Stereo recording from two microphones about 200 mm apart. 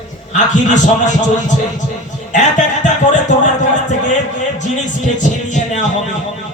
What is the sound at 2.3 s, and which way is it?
Speech, 40° left (ahead or behind).